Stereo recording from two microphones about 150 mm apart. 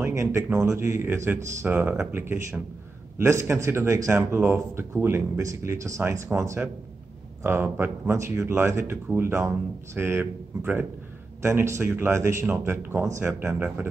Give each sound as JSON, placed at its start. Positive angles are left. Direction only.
{"t": 0.0, "sound": "speech", "side_deg": -20}